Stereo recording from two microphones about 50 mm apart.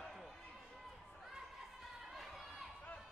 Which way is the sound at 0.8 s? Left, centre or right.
Centre.